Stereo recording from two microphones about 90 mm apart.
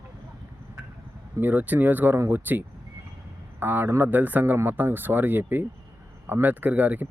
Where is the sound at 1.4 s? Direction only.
20° right (ahead or behind).